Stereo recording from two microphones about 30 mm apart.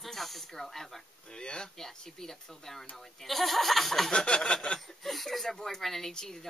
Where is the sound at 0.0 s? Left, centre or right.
Centre.